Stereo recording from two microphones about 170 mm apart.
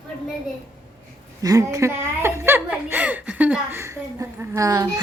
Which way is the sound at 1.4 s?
20° right (ahead or behind).